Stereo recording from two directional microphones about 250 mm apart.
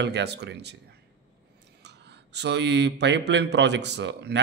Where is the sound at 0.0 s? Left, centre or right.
Right.